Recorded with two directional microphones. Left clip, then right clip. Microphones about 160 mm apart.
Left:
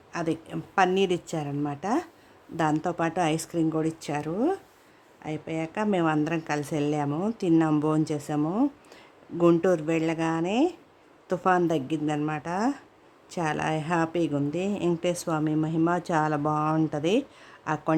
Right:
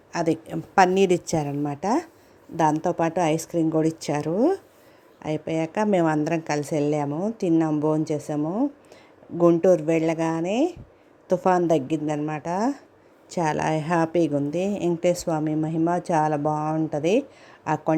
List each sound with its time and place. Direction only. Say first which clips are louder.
0.1 s speech: right 5 dB; 20° right (ahead or behind)
7.1 s a woman's voice: right 2 dB; 10° left (ahead or behind)
7.9 s speech: right 3 dB; 5° right (ahead or behind)
8.4 s a woman's voice: left 2 dB; 10° left (ahead or behind)
9.6 s speech: right 5 dB; 5° right (ahead or behind)